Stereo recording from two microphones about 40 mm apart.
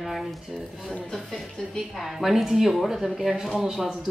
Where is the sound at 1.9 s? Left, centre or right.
Centre.